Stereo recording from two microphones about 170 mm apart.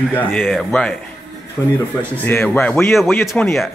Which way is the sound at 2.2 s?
10° left (ahead or behind).